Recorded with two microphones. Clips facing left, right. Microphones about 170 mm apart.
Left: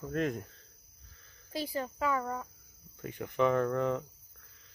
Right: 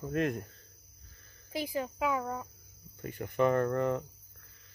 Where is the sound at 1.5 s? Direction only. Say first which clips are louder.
Right 1 dB; 15° right (ahead or behind).